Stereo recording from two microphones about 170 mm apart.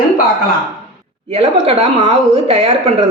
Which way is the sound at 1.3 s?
35° right (ahead or behind).